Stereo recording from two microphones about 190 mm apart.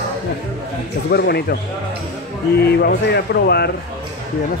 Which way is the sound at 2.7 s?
60° left (ahead or behind).